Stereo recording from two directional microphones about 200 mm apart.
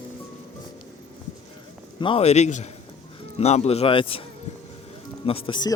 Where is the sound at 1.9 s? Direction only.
25° left (ahead or behind).